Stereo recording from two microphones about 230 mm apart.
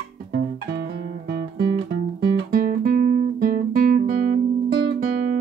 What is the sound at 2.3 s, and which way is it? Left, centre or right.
Guitar, right.